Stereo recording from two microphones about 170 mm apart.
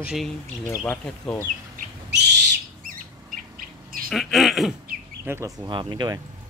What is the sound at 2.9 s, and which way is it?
Bird, 55° right (ahead or behind).